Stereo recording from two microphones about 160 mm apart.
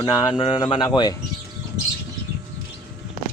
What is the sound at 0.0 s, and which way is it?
Speech, 25° left (ahead or behind).